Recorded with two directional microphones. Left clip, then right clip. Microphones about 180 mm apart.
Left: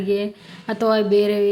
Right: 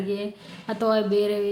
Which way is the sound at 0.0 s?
25° left (ahead or behind).